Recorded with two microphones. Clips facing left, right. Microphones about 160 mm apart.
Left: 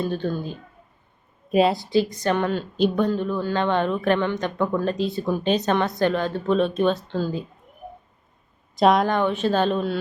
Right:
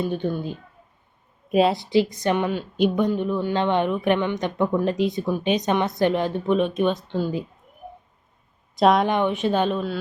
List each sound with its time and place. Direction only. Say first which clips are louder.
0.0 s a woman's voice: right 1 dB; 15° right (ahead or behind)
1.5 s speech: even; centre (ahead or behind)
1.9 s speech: right 1 dB; 20° right (ahead or behind)
2.2 s a woman's voice: even; 10° right (ahead or behind)
8.7 s a woman's voice: even; centre (ahead or behind)
9.0 s a woman's voice: even; 20° right (ahead or behind); by 10.0 s 5° right (ahead or behind)